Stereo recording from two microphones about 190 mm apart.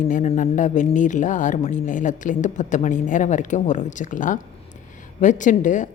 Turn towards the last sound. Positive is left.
turn(degrees=40)  # may be behind; listen again after turning